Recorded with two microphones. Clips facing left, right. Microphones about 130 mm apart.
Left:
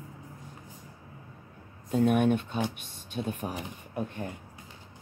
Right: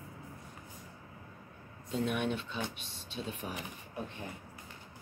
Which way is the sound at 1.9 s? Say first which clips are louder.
Left 9 dB; 50° left (ahead or behind).